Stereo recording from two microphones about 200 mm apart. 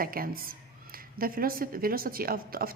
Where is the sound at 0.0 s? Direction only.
45° right (ahead or behind).